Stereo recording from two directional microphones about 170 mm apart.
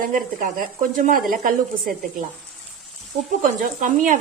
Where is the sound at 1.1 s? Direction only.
50° right (ahead or behind).